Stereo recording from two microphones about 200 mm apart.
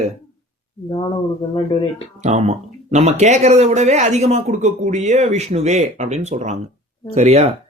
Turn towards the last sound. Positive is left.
turn(degrees=-30)  # may be behind; listen again after turning